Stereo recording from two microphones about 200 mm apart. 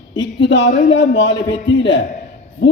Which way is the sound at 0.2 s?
60° left (ahead or behind).